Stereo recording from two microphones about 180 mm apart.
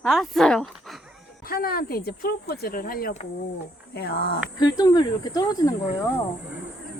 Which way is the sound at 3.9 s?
65° left (ahead or behind).